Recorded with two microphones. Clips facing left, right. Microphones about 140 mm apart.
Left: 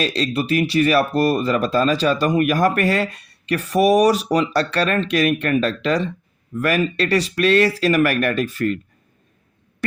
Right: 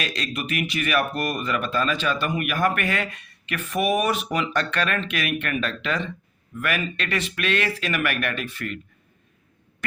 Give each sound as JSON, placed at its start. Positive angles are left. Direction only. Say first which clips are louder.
{"t": 0.0, "sound": "speech", "louder": "left 8 dB", "side_deg": 30}